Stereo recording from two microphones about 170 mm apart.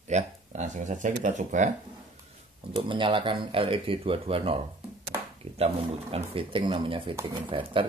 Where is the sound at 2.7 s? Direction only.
30° right (ahead or behind).